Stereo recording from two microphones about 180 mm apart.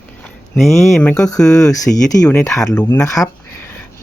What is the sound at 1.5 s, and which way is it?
Speech, 20° left (ahead or behind).